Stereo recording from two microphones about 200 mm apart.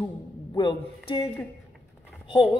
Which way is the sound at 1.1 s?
20° left (ahead or behind).